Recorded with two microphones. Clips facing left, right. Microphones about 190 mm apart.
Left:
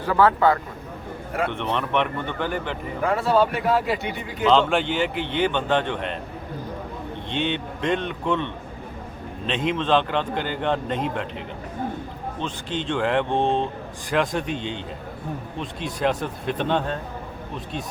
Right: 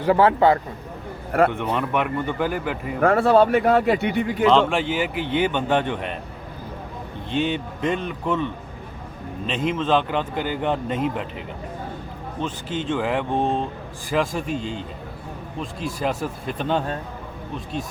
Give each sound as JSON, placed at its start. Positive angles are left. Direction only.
{"t": 0.0, "sound": "a man's voice", "side_deg": -25}
{"t": 1.5, "sound": "a man's voice", "side_deg": -10}
{"t": 3.0, "sound": "speech", "side_deg": -60}
{"t": 4.4, "sound": "a man's voice", "side_deg": 0}
{"t": 7.3, "sound": "a man's voice", "side_deg": -5}
{"t": 9.5, "sound": "a man's voice", "side_deg": 0}
{"t": 12.4, "sound": "a man's voice", "side_deg": -5}